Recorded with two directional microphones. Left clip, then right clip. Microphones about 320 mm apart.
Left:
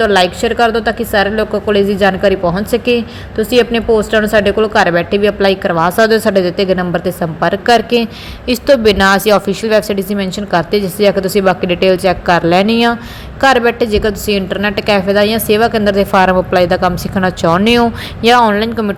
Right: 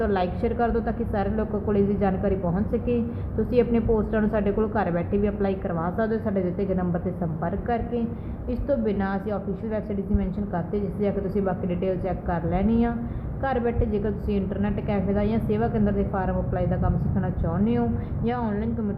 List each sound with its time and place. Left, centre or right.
0.0 s a woman's voice: centre